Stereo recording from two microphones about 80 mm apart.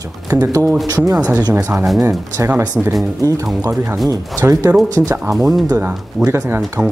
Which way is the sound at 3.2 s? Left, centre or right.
Right.